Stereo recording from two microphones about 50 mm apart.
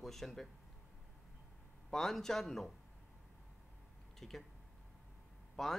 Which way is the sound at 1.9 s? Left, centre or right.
Centre.